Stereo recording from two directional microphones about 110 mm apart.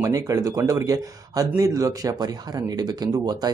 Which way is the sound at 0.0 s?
35° right (ahead or behind).